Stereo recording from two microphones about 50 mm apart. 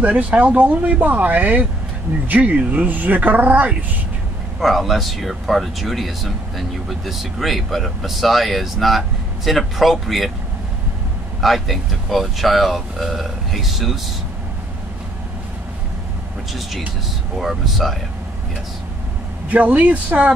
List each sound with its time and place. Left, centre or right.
0.0 s speech: right
4.6 s speech: centre
11.4 s speech: centre
17.4 s speech: centre
19.5 s speech: right